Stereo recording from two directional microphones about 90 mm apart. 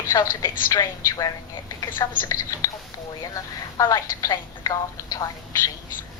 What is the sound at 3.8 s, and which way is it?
A woman's voice, 40° left (ahead or behind).